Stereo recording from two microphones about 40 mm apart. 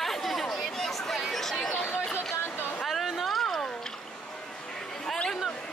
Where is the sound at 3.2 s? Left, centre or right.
Centre.